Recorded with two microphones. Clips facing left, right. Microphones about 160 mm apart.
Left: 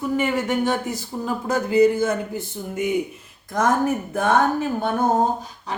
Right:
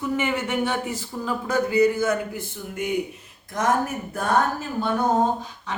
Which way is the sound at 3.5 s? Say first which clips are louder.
Left 3 dB; 50° left (ahead or behind).